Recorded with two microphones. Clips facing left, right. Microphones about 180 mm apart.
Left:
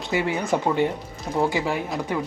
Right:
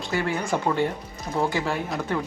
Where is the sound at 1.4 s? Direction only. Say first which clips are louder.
Left 2 dB; 15° left (ahead or behind).